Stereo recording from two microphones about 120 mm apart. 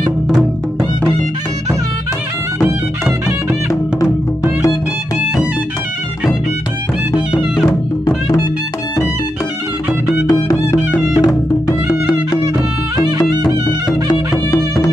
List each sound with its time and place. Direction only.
10.2 s music: 30° left (ahead or behind)
14.0 s music: 35° left (ahead or behind)